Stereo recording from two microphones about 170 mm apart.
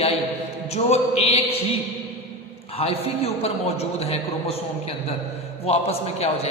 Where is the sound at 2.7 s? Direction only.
35° left (ahead or behind).